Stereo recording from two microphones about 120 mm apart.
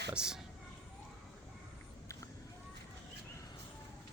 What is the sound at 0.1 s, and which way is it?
Speech, 5° right (ahead or behind).